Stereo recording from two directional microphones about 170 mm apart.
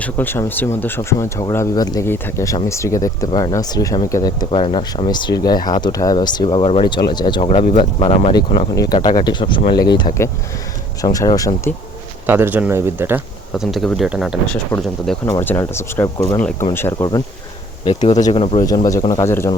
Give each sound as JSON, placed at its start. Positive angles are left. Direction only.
{"t": 0.0, "sound": "speech", "side_deg": 10}
{"t": 12.2, "sound": "speech", "side_deg": -10}
{"t": 13.6, "sound": "speech", "side_deg": 0}
{"t": 17.8, "sound": "speech", "side_deg": 45}
{"t": 18.6, "sound": "speech", "side_deg": 20}